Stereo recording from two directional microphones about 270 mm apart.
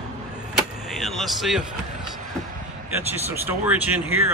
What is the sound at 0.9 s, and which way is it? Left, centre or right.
Speech, centre.